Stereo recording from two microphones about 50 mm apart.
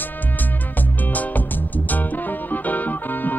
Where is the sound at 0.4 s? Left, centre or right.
Left.